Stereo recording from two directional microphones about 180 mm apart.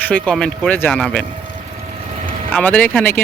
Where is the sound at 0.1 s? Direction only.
5° left (ahead or behind).